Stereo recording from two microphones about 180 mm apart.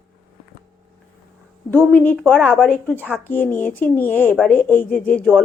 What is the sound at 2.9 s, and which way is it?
Speech, 10° right (ahead or behind).